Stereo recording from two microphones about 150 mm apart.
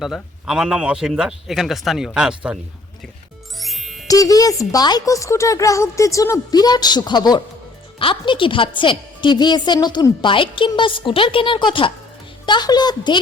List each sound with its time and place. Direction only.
0.0 s speech: 5° right (ahead or behind)
3.6 s music: centre (ahead or behind)
4.1 s a woman's voice: 25° left (ahead or behind)